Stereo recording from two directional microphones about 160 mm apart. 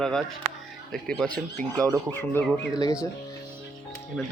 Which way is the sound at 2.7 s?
25° left (ahead or behind).